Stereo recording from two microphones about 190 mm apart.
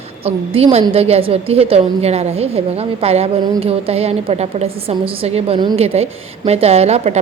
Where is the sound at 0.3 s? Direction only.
30° right (ahead or behind).